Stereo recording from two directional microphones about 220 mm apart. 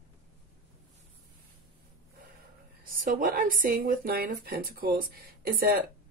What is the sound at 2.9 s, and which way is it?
Speech, 40° right (ahead or behind).